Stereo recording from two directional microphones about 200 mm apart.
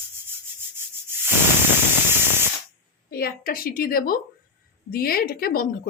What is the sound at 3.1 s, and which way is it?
A woman's voice, 50° left (ahead or behind).